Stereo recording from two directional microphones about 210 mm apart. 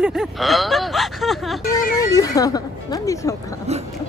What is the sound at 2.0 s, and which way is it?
Speech, 15° left (ahead or behind).